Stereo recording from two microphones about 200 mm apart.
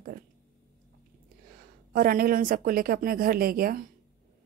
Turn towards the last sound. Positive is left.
turn(degrees=-45)  # may be behind; listen again after turning